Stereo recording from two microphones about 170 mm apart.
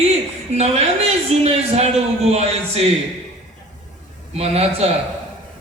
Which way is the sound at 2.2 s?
40° right (ahead or behind).